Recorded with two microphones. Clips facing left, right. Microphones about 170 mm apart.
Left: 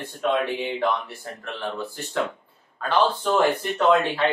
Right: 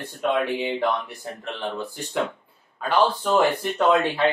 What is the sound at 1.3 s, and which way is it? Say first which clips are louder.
Speech: right 2 dB; 20° right (ahead or behind).